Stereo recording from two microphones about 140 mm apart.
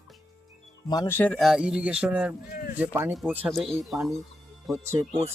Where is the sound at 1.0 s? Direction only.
15° left (ahead or behind).